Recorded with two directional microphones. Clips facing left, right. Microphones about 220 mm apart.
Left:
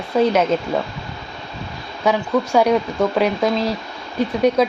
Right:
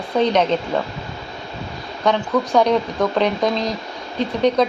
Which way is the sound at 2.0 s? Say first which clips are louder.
Even; 10° left (ahead or behind).